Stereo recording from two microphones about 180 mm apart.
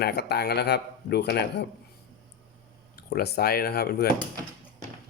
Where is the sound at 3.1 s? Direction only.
60° left (ahead or behind).